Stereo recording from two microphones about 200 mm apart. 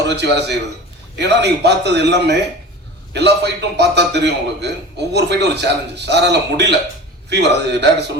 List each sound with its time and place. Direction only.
0.0 s a man's voice: 60° right (ahead or behind)